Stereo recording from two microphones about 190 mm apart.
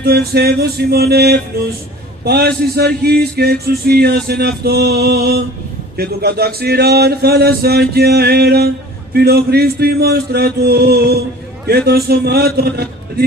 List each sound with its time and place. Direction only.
0.0 s music: 55° right (ahead or behind)